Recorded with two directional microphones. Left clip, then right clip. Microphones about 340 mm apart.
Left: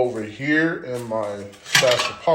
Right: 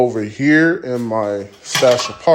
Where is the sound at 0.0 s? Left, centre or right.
Right.